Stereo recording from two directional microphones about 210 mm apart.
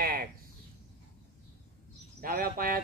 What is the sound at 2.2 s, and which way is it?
Speech, 45° right (ahead or behind).